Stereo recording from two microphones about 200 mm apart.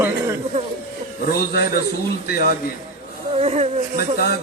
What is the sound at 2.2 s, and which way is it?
Speech, 50° left (ahead or behind).